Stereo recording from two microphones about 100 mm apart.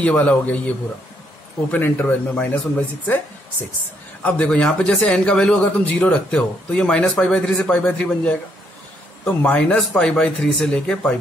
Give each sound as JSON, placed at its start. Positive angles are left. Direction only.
{"t": 0.0, "sound": "a man's voice", "side_deg": 10}
{"t": 1.7, "sound": "a man's voice", "side_deg": 20}
{"t": 4.2, "sound": "a man's voice", "side_deg": 10}